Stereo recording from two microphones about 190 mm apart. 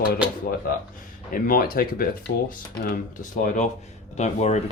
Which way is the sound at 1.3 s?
50° left (ahead or behind).